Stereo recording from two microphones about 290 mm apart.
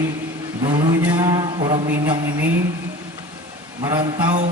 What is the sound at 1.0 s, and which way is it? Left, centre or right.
A man's voice, centre.